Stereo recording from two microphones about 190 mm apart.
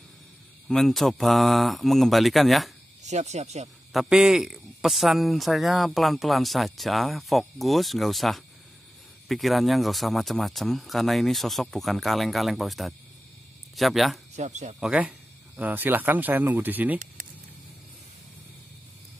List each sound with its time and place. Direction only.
0.7 s a man's voice: centre (ahead or behind)
3.0 s speech: 35° right (ahead or behind)
3.9 s a man's voice: centre (ahead or behind)
14.3 s speech: 40° right (ahead or behind)
14.8 s speech: 5° right (ahead or behind)